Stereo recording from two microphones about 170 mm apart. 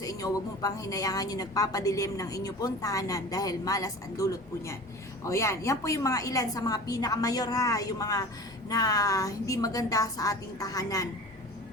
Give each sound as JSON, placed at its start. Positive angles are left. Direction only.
{"t": 0.0, "sound": "a woman's voice", "side_deg": 20}